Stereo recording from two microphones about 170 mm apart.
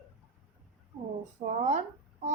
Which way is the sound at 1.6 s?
45° right (ahead or behind).